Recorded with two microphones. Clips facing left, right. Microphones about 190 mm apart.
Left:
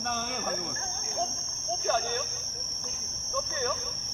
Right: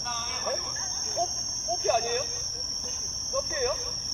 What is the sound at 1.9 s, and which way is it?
Cricket, 15° right (ahead or behind).